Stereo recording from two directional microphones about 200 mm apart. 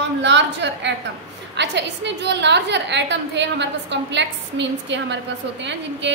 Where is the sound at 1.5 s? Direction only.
60° right (ahead or behind).